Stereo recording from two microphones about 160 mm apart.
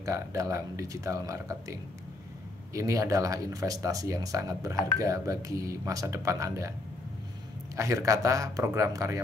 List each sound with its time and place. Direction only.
0.0 s speech: 20° right (ahead or behind)
7.7 s speech: 20° right (ahead or behind)